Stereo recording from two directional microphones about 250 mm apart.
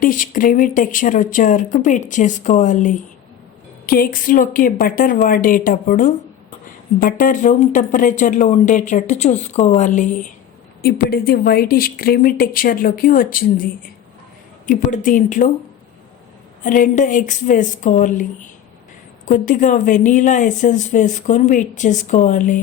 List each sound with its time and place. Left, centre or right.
0.0 s a woman's voice: left
14.7 s speech: left
16.6 s a woman's voice: left